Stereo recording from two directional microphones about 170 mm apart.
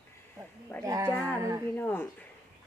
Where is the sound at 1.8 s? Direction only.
10° left (ahead or behind).